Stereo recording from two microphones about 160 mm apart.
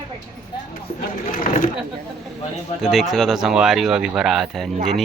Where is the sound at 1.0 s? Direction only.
55° left (ahead or behind).